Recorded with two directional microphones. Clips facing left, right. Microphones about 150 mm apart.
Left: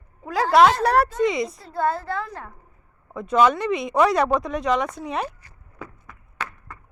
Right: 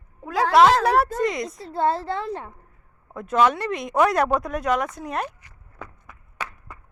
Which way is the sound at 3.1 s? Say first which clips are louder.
Left 2 dB; centre (ahead or behind).